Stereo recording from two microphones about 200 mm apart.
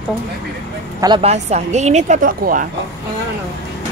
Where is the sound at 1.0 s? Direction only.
25° right (ahead or behind); by 2.7 s 45° right (ahead or behind).